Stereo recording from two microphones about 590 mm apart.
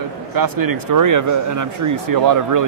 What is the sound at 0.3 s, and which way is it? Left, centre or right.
Speech, right.